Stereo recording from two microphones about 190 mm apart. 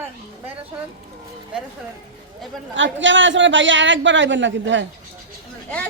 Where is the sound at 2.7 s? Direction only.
75° right (ahead or behind).